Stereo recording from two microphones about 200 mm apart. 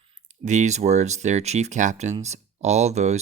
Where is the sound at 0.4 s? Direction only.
35° right (ahead or behind).